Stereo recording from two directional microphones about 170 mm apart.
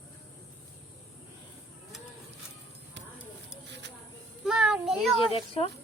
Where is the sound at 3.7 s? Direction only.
90° right.